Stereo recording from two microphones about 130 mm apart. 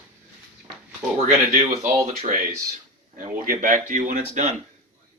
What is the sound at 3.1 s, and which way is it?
Speech, 90° right.